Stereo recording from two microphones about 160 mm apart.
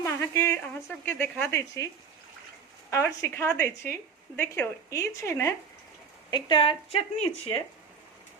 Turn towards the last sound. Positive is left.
turn(degrees=35)  # may be behind; listen again after turning